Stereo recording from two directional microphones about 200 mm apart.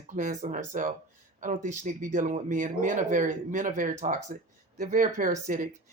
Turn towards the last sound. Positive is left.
turn(degrees=-40)  # may be behind; listen again after turning